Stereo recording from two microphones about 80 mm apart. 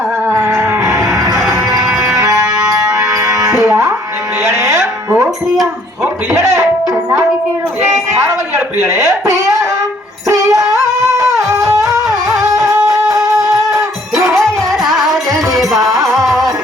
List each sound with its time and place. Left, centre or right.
0.3 s a sound: right
1.1 s music: right
1.8 s music: centre
2.1 s music: right
2.9 s music: centre
3.2 s music: right
10.2 s music: right
11.0 s a sound: right
13.7 s music: centre